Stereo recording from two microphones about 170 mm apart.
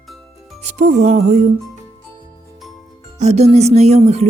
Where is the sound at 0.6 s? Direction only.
40° right (ahead or behind).